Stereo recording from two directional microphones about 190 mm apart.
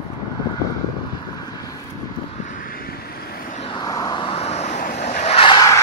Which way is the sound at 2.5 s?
45° left (ahead or behind).